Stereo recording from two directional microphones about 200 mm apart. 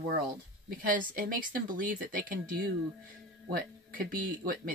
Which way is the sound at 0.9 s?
45° right (ahead or behind).